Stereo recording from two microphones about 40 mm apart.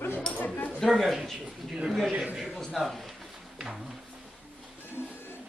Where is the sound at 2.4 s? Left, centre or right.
Centre.